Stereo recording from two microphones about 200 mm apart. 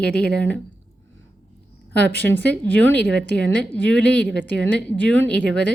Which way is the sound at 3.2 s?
60° right (ahead or behind).